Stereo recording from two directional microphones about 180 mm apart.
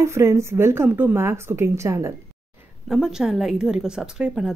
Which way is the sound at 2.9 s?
5° right (ahead or behind).